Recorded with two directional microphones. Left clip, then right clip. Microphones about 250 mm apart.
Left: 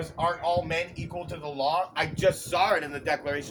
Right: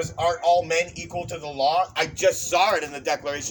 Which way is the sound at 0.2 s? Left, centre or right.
Right.